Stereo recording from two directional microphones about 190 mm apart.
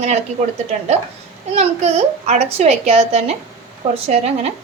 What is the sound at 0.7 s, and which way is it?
A woman's voice, 35° right (ahead or behind).